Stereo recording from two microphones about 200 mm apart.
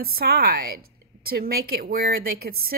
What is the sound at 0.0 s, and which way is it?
Speech, 50° right (ahead or behind).